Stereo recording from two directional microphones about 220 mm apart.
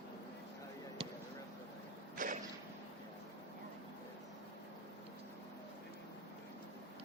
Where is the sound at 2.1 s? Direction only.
35° right (ahead or behind).